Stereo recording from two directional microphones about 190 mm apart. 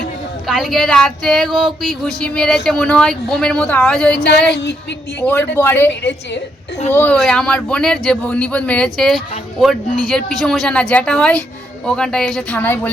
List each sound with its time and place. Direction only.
0.4 s speech: centre (ahead or behind)
5.2 s a woman's voice: 10° left (ahead or behind)
5.9 s a woman's voice: 65° left (ahead or behind)
6.9 s speech: 5° left (ahead or behind)